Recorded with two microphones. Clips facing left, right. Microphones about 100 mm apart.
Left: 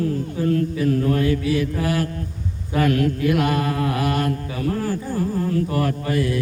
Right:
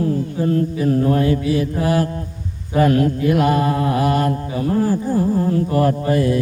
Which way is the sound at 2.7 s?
30° right (ahead or behind).